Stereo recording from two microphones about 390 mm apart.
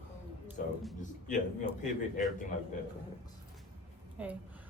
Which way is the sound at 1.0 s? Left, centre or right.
Centre.